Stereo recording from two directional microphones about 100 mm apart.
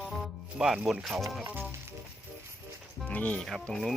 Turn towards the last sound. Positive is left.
turn(degrees=5)  # may be behind; listen again after turning